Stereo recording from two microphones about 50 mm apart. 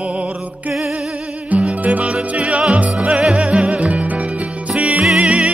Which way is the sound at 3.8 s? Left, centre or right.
Right.